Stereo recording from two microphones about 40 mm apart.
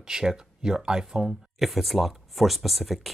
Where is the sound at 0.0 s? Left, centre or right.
Centre.